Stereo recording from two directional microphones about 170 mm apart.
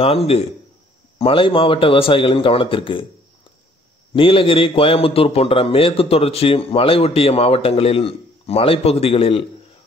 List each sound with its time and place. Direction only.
0.0 s a man's voice: 35° left (ahead or behind)
4.1 s a man's voice: 30° left (ahead or behind)